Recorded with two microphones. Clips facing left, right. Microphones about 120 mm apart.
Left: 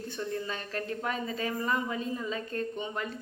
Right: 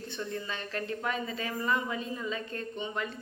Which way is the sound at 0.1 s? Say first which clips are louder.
Left 2 dB; 35° left (ahead or behind).